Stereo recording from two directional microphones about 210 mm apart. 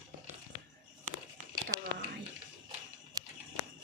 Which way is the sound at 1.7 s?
15° right (ahead or behind).